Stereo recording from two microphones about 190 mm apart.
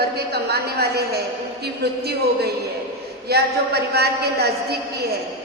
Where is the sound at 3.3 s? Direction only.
60° right (ahead or behind).